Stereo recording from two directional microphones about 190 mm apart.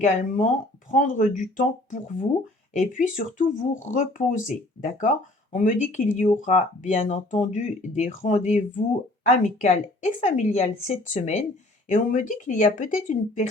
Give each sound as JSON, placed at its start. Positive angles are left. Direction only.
{"t": 0.3, "sound": "speech", "side_deg": 45}